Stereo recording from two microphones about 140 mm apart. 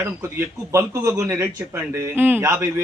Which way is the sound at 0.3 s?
20° right (ahead or behind).